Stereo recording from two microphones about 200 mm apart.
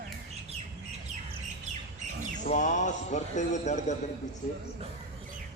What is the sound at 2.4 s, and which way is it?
A man's voice, 35° left (ahead or behind).